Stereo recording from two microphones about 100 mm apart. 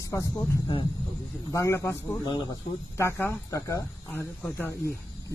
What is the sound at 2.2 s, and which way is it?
Speech, 50° left (ahead or behind).